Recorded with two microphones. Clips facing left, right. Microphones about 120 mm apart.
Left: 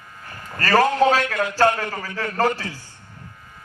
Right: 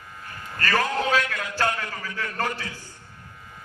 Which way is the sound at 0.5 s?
40° left (ahead or behind).